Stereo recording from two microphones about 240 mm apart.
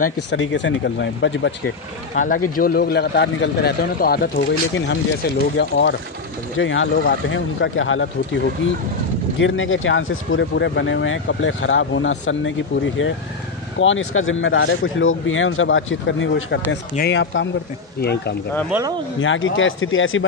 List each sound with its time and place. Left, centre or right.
0.0 s speech: left
2.1 s a man's voice: left
5.6 s speech: left
9.4 s speech: left
18.7 s speech: centre
19.1 s speech: left